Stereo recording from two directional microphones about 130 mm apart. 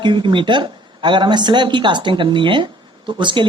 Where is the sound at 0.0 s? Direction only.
35° right (ahead or behind).